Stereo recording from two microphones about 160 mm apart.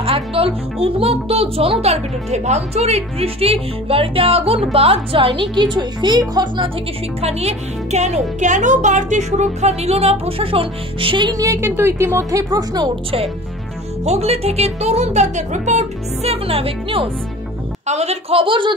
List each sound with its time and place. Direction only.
0.0 s speech: 35° right (ahead or behind)
7.2 s speech: 40° right (ahead or behind)
14.0 s speech: 40° right (ahead or behind)